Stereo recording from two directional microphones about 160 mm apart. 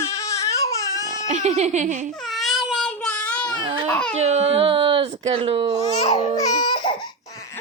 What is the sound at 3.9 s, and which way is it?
Speech, 5° left (ahead or behind).